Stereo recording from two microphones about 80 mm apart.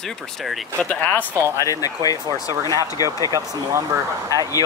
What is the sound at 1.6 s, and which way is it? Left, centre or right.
Speech, left.